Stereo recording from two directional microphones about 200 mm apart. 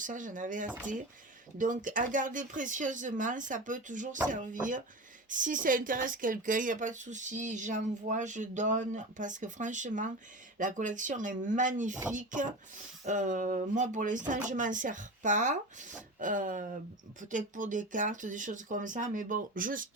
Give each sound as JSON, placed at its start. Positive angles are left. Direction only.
{"t": 0.0, "sound": "speech", "side_deg": -40}